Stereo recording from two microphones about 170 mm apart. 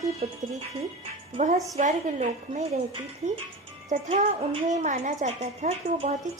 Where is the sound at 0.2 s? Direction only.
50° right (ahead or behind).